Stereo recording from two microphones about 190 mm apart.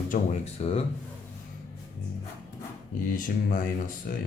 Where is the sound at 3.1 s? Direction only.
45° left (ahead or behind).